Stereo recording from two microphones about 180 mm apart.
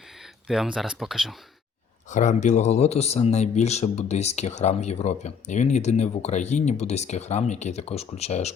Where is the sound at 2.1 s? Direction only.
45° left (ahead or behind).